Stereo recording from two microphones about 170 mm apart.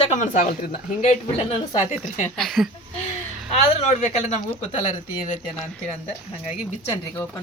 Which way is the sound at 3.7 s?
45° left (ahead or behind).